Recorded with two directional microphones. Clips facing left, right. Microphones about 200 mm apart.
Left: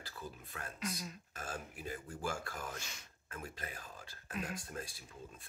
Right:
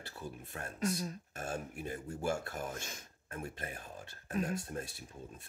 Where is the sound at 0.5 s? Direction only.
35° right (ahead or behind).